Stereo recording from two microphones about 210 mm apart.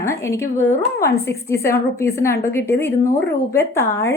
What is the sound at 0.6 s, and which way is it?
A woman's voice, 15° left (ahead or behind).